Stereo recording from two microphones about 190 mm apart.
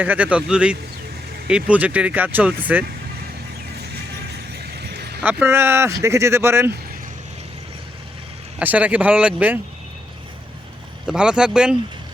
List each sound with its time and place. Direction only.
0.0 s speech: 10° right (ahead or behind)
4.8 s a sound: 60° right (ahead or behind)
5.2 s speech: 10° right (ahead or behind)
8.5 s speech: 10° right (ahead or behind)
11.0 s speech: 5° right (ahead or behind)